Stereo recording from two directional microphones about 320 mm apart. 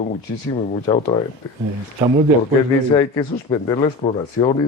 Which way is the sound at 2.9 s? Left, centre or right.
Centre.